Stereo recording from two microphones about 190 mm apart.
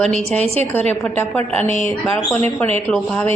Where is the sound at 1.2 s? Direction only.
10° left (ahead or behind).